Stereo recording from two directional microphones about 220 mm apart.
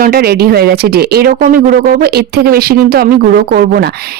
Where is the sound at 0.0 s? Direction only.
45° right (ahead or behind).